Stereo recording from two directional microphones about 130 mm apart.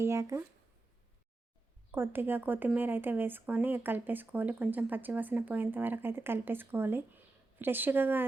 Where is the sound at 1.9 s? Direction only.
15° right (ahead or behind).